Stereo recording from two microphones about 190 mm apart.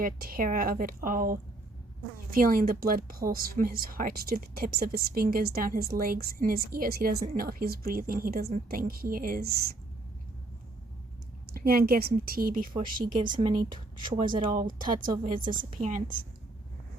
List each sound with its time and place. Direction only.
0.0 s speech: 50° right (ahead or behind)
11.5 s speech: 50° right (ahead or behind)
13.3 s speech: 25° right (ahead or behind)
14.7 s speech: 45° right (ahead or behind)